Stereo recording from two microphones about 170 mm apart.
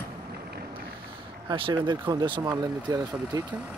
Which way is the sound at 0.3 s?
70° right (ahead or behind).